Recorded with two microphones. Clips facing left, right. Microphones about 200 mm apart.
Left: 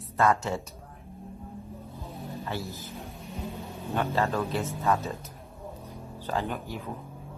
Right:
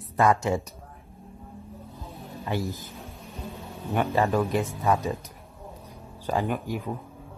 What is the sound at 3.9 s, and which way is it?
Speech, 15° right (ahead or behind).